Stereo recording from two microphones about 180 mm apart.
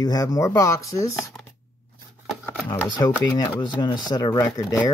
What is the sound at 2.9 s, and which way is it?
Speech, 25° left (ahead or behind).